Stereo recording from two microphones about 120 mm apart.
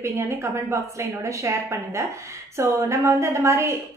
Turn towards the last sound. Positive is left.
turn(degrees=-25)  # may be behind; listen again after turning